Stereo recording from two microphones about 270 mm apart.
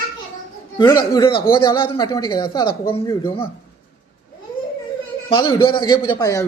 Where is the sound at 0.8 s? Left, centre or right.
Centre.